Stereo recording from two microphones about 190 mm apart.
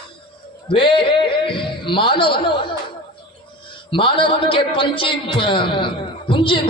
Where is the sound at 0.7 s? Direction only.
25° left (ahead or behind).